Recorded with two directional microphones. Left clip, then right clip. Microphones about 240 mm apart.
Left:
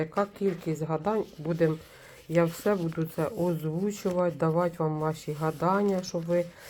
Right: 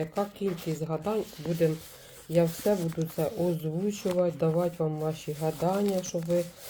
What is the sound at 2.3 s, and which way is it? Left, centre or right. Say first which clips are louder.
Speech: even; centre.